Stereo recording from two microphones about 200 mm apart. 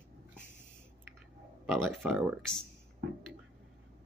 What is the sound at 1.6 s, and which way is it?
Speech, centre (ahead or behind).